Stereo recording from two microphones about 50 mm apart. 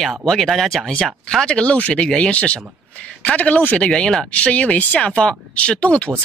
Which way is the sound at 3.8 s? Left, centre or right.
Centre.